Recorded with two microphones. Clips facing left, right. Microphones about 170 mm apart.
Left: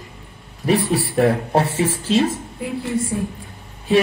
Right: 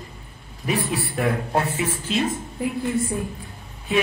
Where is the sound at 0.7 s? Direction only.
35° left (ahead or behind).